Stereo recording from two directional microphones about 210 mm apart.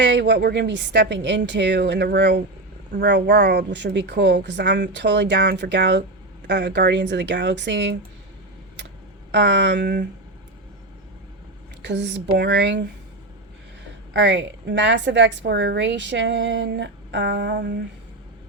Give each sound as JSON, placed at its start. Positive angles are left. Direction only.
{"t": 0.0, "sound": "a woman's voice", "side_deg": -55}
{"t": 9.3, "sound": "a woman's voice", "side_deg": -55}
{"t": 11.8, "sound": "a woman's voice", "side_deg": -55}
{"t": 14.1, "sound": "a woman's voice", "side_deg": -55}